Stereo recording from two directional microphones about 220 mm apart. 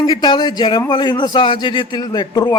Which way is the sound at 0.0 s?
20° left (ahead or behind).